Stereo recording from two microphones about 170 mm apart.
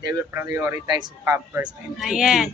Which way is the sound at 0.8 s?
25° right (ahead or behind).